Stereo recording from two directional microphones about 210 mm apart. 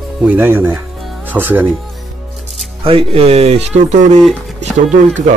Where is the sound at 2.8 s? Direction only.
25° right (ahead or behind).